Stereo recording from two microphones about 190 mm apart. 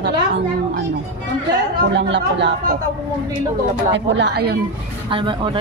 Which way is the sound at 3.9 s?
70° right (ahead or behind).